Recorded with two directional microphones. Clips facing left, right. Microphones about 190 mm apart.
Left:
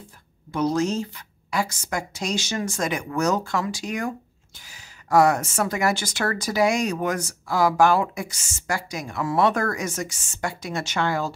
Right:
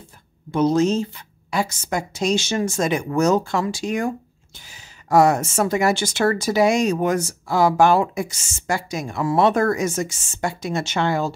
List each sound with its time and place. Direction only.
0.5 s speech: 25° right (ahead or behind)